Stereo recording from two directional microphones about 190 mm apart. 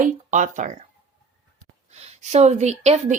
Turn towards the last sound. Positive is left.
turn(degrees=-35)  # may be behind; listen again after turning